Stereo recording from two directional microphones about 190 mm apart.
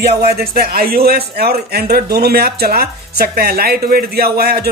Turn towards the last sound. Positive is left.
turn(degrees=-55)  # may be behind; listen again after turning